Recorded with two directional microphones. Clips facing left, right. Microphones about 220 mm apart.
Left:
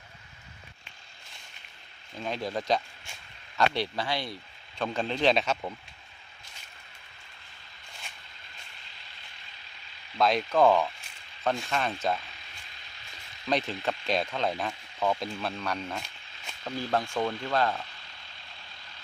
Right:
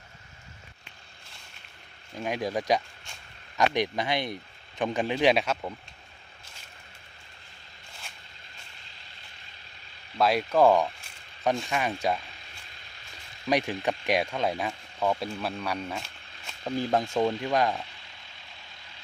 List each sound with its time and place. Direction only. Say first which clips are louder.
2.1 s speech: right 3 dB; 15° right (ahead or behind)
10.2 s speech: right 1 dB; 5° right (ahead or behind)
13.5 s speech: right 3 dB; 15° right (ahead or behind)
16.7 s speech: right 3 dB; 20° right (ahead or behind)